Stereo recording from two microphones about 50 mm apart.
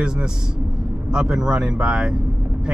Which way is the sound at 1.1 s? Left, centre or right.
Centre.